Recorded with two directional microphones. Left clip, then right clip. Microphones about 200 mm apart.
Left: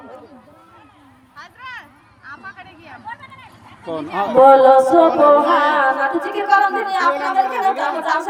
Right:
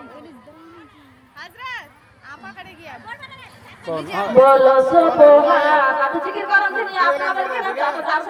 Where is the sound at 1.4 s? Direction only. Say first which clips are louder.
Right 2 dB; 40° right (ahead or behind).